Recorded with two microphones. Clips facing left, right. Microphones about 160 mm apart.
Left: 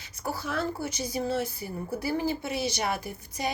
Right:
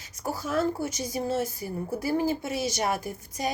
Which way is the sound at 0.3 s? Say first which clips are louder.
Right 5 dB; 45° right (ahead or behind).